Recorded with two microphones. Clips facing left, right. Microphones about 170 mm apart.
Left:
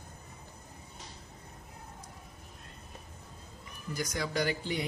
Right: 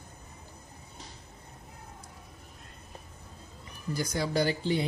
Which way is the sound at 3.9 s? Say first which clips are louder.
Right 4 dB; 30° right (ahead or behind).